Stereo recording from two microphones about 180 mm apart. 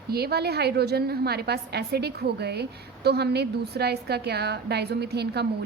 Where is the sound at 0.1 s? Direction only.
60° right (ahead or behind).